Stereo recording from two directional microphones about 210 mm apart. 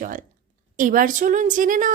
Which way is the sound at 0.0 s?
40° right (ahead or behind).